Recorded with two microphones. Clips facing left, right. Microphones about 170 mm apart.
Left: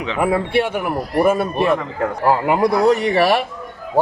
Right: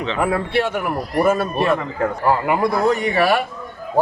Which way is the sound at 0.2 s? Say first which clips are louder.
Left 3 dB; 15° left (ahead or behind).